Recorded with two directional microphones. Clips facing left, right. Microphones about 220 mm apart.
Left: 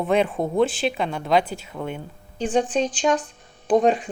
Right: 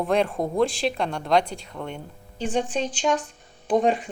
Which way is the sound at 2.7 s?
45° left (ahead or behind).